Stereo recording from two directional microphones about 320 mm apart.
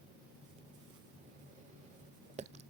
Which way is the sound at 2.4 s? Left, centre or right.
Right.